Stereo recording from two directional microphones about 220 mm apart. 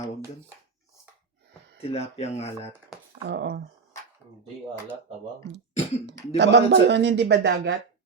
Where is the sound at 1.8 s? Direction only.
30° left (ahead or behind).